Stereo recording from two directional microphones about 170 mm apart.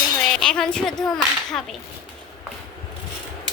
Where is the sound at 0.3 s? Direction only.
5° left (ahead or behind).